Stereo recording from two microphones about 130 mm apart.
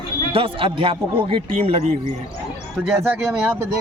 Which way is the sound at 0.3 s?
45° right (ahead or behind).